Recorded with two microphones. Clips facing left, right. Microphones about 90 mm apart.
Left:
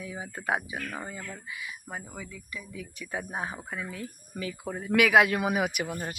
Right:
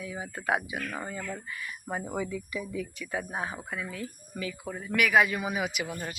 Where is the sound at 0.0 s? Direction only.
25° left (ahead or behind).